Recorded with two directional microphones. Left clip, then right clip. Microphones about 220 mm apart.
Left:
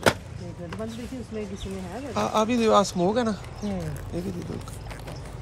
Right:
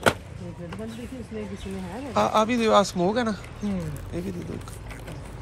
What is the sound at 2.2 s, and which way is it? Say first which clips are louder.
Speech: right 2 dB; 15° left (ahead or behind).